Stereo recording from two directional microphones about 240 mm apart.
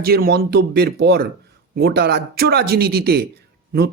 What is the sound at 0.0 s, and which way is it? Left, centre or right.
A man's voice, right.